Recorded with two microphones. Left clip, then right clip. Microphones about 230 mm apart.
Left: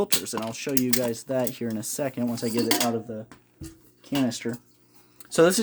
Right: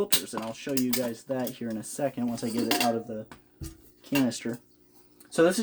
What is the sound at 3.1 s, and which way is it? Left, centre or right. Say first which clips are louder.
Speech: left 1 dB; left.